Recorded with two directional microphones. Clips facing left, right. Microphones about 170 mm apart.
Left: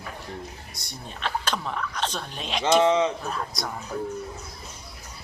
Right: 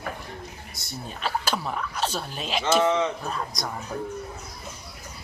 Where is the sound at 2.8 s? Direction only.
20° left (ahead or behind).